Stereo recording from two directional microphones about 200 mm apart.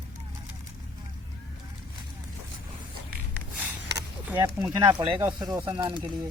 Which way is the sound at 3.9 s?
15° right (ahead or behind).